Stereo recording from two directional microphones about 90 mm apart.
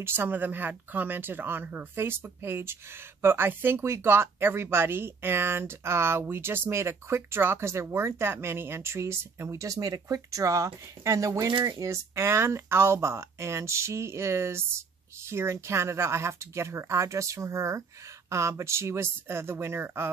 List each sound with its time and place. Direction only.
0.0 s speech: 25° right (ahead or behind)